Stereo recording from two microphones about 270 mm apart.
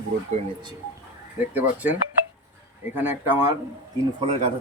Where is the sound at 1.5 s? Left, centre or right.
Centre.